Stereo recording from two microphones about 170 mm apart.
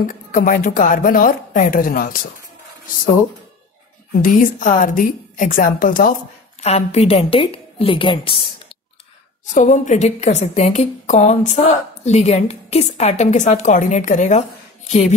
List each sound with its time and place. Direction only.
0.0 s a woman's voice: 50° left (ahead or behind)
4.2 s a woman's voice: 50° left (ahead or behind)
6.6 s a woman's voice: 40° left (ahead or behind)
9.5 s a woman's voice: 45° left (ahead or behind)